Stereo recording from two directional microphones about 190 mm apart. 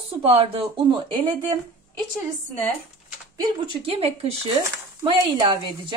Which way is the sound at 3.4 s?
30° right (ahead or behind).